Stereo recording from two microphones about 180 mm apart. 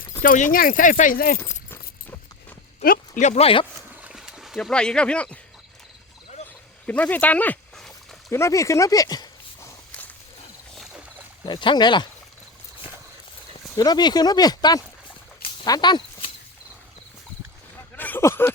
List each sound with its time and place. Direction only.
0.2 s speech: 45° left (ahead or behind)
2.8 s speech: 45° left (ahead or behind); by 3.7 s 30° left (ahead or behind)
3.8 s a sound: 5° right (ahead or behind)
6.8 s speech: 10° left (ahead or behind)
8.3 s walk: 15° left (ahead or behind)
11.4 s speech: 25° left (ahead or behind)
13.7 s speech: 20° left (ahead or behind)
15.4 s a sound: 20° left (ahead or behind)
17.9 s a sound: 10° left (ahead or behind)